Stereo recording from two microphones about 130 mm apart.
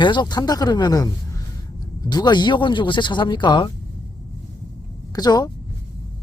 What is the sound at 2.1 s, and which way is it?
Speech, 35° left (ahead or behind).